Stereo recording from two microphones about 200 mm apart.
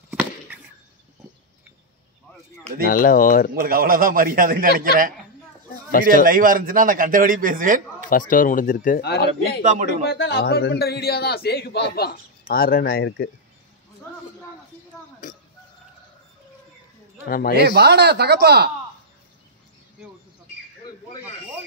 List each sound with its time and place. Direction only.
0.1 s chop: 5° right (ahead or behind)
2.8 s a man's voice: 45° left (ahead or behind)
3.5 s a man's voice: 45° right (ahead or behind)
8.1 s a man's voice: 45° left (ahead or behind)
9.6 s a man's voice: 40° right (ahead or behind)
10.0 s a man's voice: 60° left (ahead or behind)
15.2 s oink: 40° left (ahead or behind)
17.3 s a man's voice: 45° left (ahead or behind)
17.6 s speech: 55° right (ahead or behind)